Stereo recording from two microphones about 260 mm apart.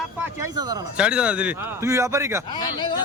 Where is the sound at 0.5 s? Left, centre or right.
Centre.